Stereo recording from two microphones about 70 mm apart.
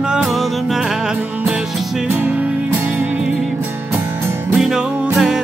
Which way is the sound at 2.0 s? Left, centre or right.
Right.